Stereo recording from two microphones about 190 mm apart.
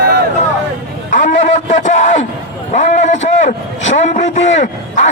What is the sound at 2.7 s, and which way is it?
A man's voice, 40° left (ahead or behind).